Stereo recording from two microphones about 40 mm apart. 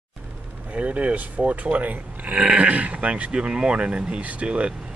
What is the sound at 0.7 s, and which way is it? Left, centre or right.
Speech, right.